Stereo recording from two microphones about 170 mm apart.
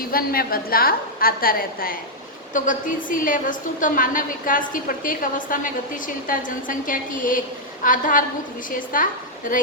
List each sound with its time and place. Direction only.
0.1 s a woman's voice: 60° left (ahead or behind)